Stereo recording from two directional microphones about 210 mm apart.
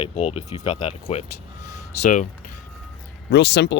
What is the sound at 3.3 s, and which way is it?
Speech, 55° left (ahead or behind).